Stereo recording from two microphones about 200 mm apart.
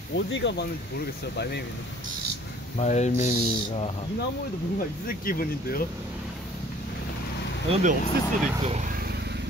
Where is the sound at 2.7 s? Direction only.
35° left (ahead or behind).